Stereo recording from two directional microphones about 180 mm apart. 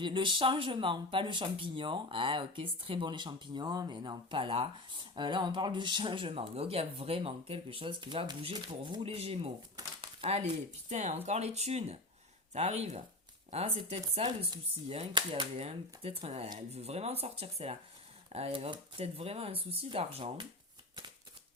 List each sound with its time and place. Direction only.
0.0 s speech: 30° right (ahead or behind)
9.7 s a sound: 30° right (ahead or behind)
10.8 s speech: 40° right (ahead or behind)